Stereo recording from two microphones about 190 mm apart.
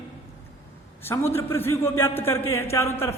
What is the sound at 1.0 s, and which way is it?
A man's voice, 10° left (ahead or behind).